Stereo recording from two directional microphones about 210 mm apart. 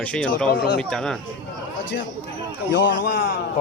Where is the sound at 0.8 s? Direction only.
5° left (ahead or behind).